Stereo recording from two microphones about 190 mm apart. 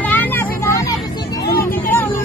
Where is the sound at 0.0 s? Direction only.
10° left (ahead or behind).